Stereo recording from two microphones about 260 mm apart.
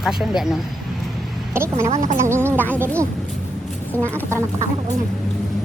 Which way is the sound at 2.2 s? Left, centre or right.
Centre.